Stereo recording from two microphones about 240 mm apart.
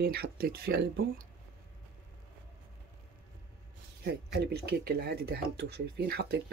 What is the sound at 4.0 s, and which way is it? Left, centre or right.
Speech, right.